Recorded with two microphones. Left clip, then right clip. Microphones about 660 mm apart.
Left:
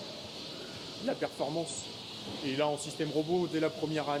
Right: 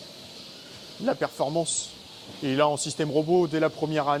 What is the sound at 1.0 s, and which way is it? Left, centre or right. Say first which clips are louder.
Speech: right 8 dB; right.